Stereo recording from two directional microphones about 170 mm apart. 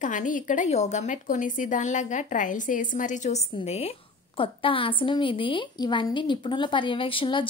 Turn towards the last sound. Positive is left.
turn(degrees=30)  # may be behind; listen again after turning